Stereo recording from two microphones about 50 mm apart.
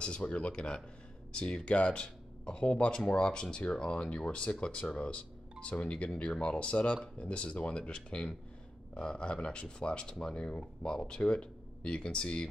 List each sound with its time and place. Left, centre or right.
0.0 s speech: centre